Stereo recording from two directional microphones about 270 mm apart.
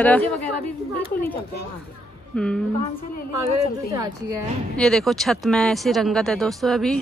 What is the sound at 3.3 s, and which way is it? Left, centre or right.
Speech, right.